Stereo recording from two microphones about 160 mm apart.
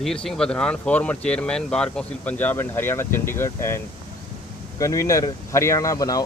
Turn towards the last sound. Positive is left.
turn(degrees=20)  # may be behind; listen again after turning